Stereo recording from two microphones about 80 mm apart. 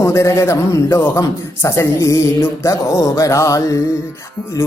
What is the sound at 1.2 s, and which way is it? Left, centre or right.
Speech, left.